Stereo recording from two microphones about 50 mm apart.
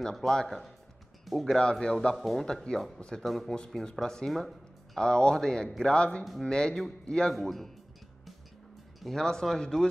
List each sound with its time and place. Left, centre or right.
0.0 s speech: centre
1.6 s speech: centre
2.1 s speech: centre
2.4 s speech: centre
3.5 s speech: centre
4.3 s a sound: centre
5.0 s speech: centre
7.3 s speech: centre
9.0 s speech: centre